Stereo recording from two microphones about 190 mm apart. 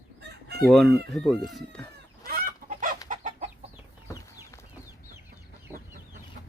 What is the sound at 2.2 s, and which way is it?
Chicken, 45° right (ahead or behind).